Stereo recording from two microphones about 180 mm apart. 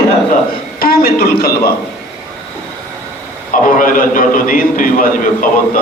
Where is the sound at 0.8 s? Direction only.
55° left (ahead or behind).